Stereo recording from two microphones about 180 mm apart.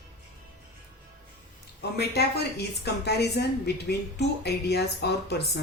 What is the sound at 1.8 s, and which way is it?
A woman's voice, 65° left (ahead or behind).